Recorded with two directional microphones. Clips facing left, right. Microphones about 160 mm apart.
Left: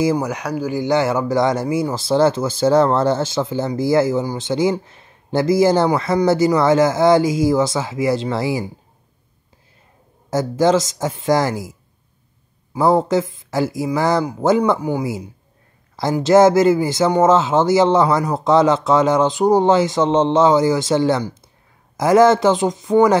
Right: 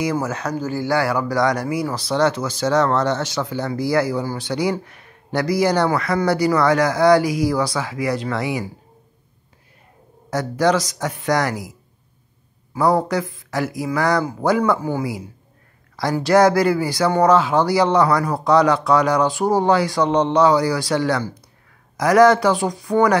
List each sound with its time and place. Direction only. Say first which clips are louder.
0.2 s speech: left 2 dB; 15° left (ahead or behind)
10.3 s speech: left 3 dB; 25° left (ahead or behind)
12.7 s speech: left 3 dB; 25° left (ahead or behind)